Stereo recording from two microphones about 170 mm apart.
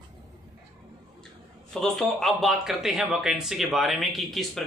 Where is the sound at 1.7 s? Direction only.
Centre (ahead or behind).